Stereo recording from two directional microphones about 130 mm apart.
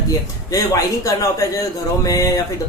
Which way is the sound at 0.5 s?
25° left (ahead or behind).